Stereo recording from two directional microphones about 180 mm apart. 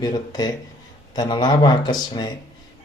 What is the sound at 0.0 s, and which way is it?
Speech, 20° left (ahead or behind).